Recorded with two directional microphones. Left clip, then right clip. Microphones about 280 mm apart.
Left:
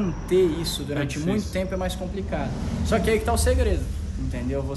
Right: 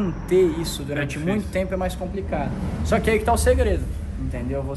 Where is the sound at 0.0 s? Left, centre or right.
Centre.